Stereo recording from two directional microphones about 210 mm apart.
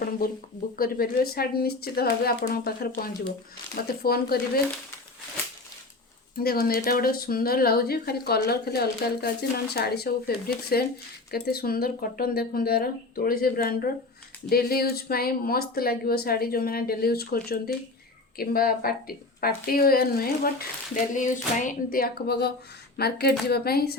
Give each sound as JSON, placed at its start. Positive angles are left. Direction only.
{"t": 0.8, "sound": "speech", "side_deg": 45}
{"t": 6.3, "sound": "speech", "side_deg": 45}